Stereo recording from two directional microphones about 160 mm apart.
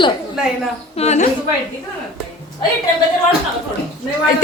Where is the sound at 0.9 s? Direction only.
40° left (ahead or behind).